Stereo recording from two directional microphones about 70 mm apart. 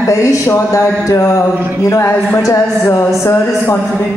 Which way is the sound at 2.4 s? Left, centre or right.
Left.